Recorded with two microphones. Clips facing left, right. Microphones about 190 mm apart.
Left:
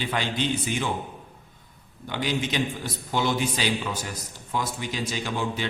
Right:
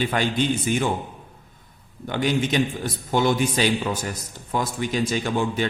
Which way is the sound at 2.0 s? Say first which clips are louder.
Right 5 dB; 50° right (ahead or behind).